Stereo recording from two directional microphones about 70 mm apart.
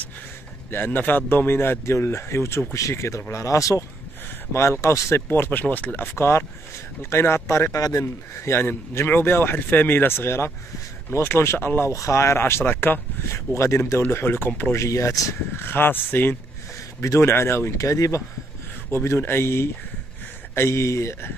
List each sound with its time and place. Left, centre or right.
0.7 s speech: left
6.1 s speech: left
11.9 s speech: left
14.8 s speech: left
15.5 s speech: left
18.9 s speech: left